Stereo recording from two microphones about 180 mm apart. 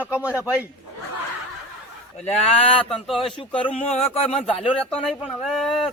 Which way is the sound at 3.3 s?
30° left (ahead or behind).